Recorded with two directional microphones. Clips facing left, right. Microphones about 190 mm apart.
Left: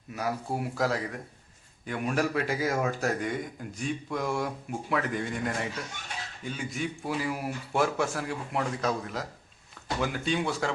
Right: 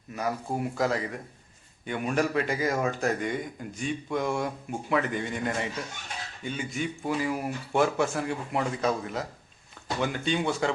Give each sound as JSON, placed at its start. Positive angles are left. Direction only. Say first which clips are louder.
{"t": 0.1, "sound": "speech", "louder": "right 1 dB", "side_deg": 5}